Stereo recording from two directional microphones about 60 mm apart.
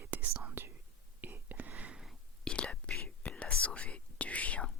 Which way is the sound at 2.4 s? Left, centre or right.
Centre.